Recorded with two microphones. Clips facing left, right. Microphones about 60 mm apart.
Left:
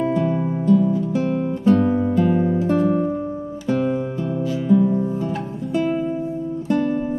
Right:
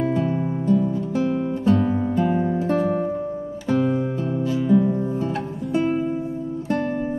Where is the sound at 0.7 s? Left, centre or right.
Centre.